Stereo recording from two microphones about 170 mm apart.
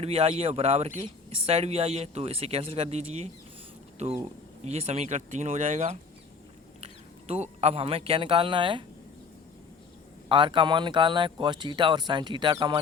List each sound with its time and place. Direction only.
0.0 s speech: 35° right (ahead or behind)
10.2 s speech: 30° right (ahead or behind)